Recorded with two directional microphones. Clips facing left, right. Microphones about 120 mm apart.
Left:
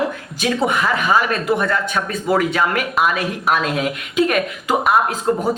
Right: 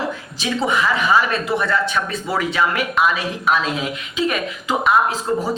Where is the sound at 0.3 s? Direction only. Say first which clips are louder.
Left 2 dB; 50° left (ahead or behind).